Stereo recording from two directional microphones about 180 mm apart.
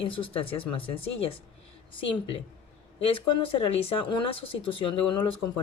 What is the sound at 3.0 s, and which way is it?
Speech, 30° left (ahead or behind).